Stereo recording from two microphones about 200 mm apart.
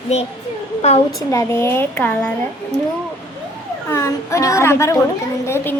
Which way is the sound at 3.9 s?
15° left (ahead or behind).